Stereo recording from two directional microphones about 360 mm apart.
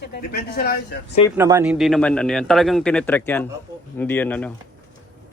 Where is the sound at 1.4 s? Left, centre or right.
Centre.